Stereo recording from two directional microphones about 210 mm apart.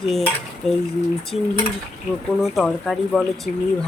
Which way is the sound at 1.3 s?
30° left (ahead or behind).